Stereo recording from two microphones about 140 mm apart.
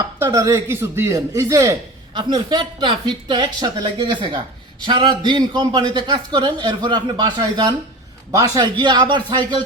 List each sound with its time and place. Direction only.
0.2 s speech: 20° right (ahead or behind)
2.1 s a man's voice: 35° right (ahead or behind)